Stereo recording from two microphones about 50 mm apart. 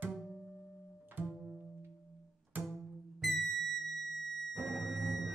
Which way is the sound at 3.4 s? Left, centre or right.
Centre.